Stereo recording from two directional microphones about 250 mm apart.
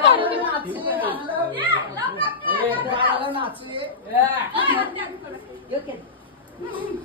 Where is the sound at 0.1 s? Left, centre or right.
Right.